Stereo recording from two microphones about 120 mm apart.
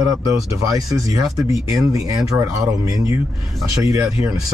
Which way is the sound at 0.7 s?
30° right (ahead or behind).